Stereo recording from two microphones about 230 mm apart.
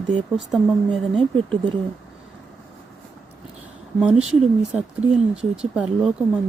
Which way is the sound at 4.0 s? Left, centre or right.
Centre.